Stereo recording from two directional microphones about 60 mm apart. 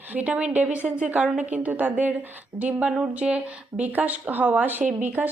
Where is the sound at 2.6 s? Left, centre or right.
Centre.